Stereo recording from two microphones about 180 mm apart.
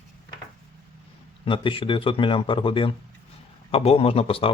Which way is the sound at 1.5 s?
25° left (ahead or behind).